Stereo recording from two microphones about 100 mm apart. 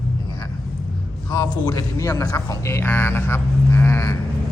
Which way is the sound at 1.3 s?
40° left (ahead or behind).